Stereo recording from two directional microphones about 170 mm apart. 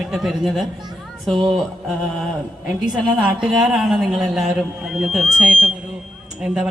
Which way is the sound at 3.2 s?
5° right (ahead or behind).